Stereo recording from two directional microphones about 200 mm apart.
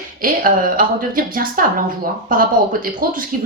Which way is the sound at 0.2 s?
45° right (ahead or behind).